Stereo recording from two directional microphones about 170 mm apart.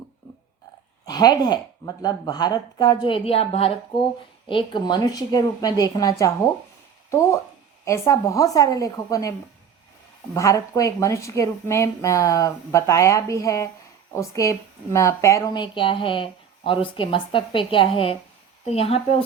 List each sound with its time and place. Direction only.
1.0 s speech: 25° left (ahead or behind)
10.3 s a woman's voice: 20° left (ahead or behind); by 19.1 s 35° left (ahead or behind)